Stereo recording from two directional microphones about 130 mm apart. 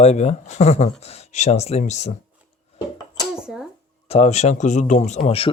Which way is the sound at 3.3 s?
5° right (ahead or behind).